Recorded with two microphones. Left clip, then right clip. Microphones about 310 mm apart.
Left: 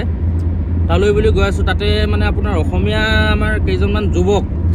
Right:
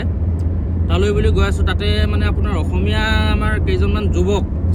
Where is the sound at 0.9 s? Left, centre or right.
Centre.